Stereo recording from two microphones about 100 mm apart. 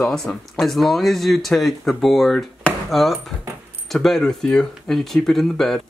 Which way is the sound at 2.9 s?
Centre (ahead or behind).